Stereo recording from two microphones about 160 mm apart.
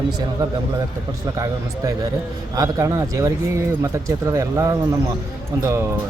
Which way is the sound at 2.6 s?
20° right (ahead or behind).